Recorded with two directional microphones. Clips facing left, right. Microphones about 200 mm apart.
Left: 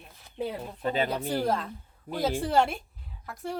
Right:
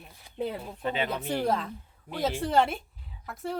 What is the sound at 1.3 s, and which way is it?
Speech, centre (ahead or behind).